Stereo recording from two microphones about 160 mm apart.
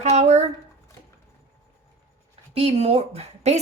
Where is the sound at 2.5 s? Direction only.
40° right (ahead or behind).